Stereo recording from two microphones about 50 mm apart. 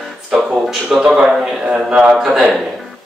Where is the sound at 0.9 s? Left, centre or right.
Centre.